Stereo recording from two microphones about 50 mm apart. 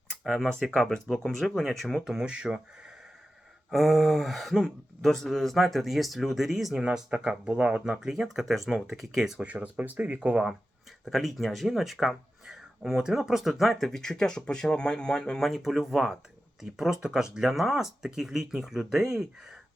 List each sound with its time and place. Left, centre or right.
0.6 s speech: centre
2.0 s speech: centre
3.7 s speech: centre
6.7 s speech: centre
7.9 s speech: centre
9.4 s speech: right
11.0 s speech: centre
15.4 s speech: centre